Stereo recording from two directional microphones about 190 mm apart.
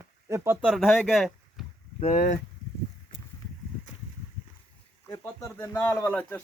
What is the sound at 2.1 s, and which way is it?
Speech, 45° left (ahead or behind).